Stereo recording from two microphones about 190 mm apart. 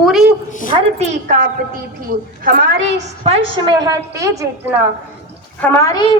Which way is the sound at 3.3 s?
20° right (ahead or behind).